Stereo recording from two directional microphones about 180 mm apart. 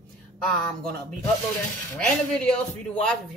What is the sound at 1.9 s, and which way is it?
Speech, 5° left (ahead or behind).